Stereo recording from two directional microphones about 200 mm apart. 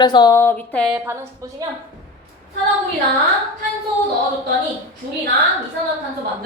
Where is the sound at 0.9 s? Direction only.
15° right (ahead or behind).